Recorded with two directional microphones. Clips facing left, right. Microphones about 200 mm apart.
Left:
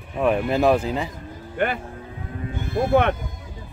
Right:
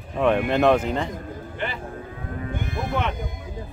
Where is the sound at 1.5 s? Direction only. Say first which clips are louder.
Left 8 dB; 55° left (ahead or behind).